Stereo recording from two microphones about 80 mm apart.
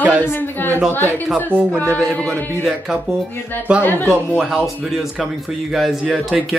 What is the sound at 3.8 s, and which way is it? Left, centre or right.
Speech, left.